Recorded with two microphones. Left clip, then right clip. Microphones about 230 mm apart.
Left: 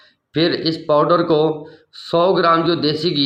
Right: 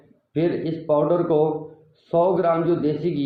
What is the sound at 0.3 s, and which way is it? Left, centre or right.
A man's voice, left.